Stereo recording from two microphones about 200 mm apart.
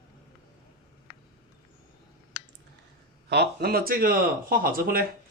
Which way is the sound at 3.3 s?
55° right (ahead or behind).